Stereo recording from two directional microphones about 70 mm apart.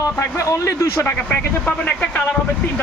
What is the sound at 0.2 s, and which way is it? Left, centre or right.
Speech, left.